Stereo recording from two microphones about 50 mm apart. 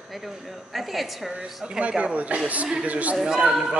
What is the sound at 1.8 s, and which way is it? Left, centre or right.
Speech, right.